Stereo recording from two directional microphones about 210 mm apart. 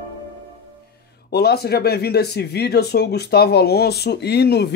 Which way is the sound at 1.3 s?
50° left (ahead or behind).